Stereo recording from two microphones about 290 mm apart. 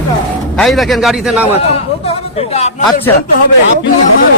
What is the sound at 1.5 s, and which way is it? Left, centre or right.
A man's voice, left.